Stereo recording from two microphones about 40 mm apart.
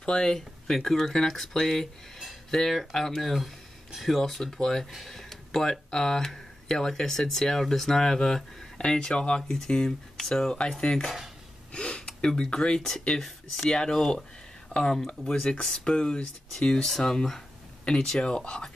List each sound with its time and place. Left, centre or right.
0.0 s speech: centre
9.4 s speech: centre
11.7 s speech: left
16.8 s speech: centre
17.9 s speech: left